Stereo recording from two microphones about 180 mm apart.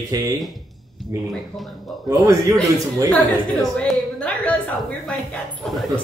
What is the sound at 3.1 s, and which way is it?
A woman's voice, 5° left (ahead or behind).